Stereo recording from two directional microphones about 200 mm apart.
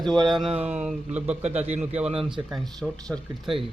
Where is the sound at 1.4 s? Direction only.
35° right (ahead or behind).